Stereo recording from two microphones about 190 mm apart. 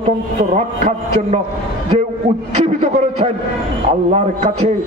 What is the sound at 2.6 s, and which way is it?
Speech, 35° right (ahead or behind).